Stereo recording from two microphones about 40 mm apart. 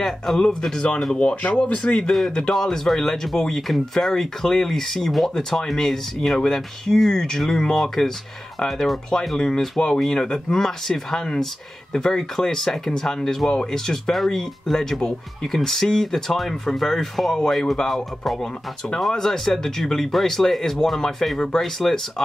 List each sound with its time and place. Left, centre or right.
0.0 s speech: centre
9.4 s speech: centre
19.1 s speech: centre